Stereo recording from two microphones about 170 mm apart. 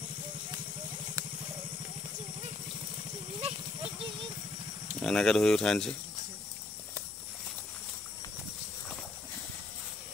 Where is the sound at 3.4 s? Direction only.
35° right (ahead or behind).